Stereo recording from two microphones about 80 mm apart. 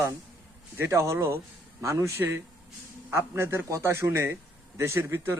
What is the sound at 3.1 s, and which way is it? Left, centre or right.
A man's voice, right.